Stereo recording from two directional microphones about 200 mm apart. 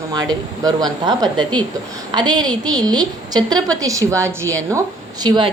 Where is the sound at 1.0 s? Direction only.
20° right (ahead or behind).